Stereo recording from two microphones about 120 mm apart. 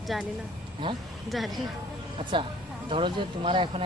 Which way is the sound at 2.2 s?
45° right (ahead or behind).